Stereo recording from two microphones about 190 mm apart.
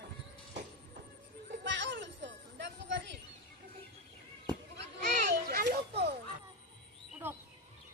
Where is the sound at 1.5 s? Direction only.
70° right (ahead or behind).